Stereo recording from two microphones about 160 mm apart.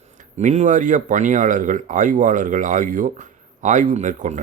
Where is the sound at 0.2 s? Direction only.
45° right (ahead or behind).